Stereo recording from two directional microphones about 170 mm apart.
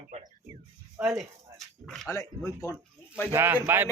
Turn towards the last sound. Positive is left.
turn(degrees=-15)  # may be behind; listen again after turning